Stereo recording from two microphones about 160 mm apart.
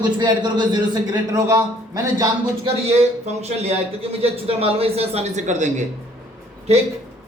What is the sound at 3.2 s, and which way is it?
A man's voice, 40° right (ahead or behind).